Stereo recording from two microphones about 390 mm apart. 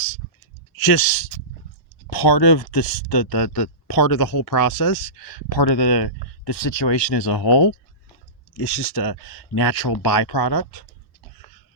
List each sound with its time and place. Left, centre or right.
0.8 s speech: left
2.0 s speech: left
8.5 s speech: left